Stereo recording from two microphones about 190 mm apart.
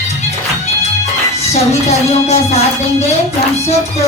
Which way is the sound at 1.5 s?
35° left (ahead or behind).